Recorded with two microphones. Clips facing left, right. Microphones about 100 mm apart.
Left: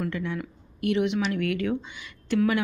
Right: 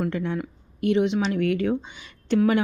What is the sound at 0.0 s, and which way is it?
A woman's voice, 30° right (ahead or behind).